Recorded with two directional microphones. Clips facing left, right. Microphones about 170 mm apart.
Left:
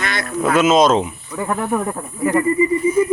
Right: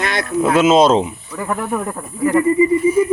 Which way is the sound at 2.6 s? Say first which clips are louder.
Right 2 dB; 10° right (ahead or behind).